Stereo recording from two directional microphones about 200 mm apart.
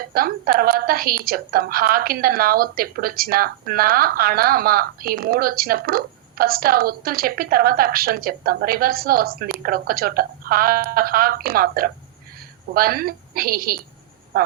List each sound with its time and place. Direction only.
0.1 s a woman's voice: 45° right (ahead or behind)